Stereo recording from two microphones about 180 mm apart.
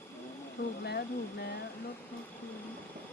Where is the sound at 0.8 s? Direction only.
65° left (ahead or behind).